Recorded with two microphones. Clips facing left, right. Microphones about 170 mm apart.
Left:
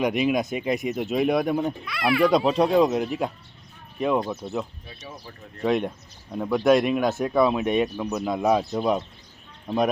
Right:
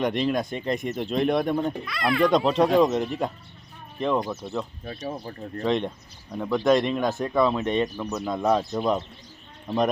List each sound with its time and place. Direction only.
0.0 s a child's voice: 10° left (ahead or behind)
4.4 s a child's voice: 5° right (ahead or behind)
4.9 s speech: 45° right (ahead or behind)
5.1 s speech: 30° right (ahead or behind)
5.6 s speech: 10° left (ahead or behind)